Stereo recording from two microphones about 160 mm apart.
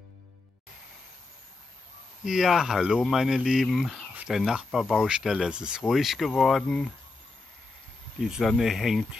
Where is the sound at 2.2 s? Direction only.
5° right (ahead or behind).